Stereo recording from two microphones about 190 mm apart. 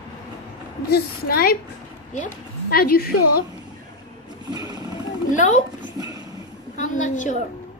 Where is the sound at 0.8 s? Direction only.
55° left (ahead or behind).